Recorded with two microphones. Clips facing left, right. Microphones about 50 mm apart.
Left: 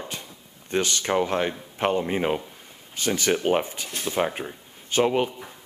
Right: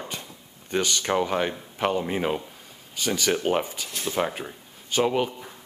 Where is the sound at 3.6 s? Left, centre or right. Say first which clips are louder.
Left 1 dB; left.